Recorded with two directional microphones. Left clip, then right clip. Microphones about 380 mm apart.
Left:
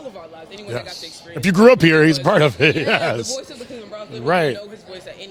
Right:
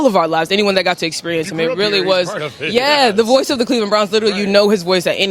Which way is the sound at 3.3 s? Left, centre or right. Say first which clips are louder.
Right 17 dB; right.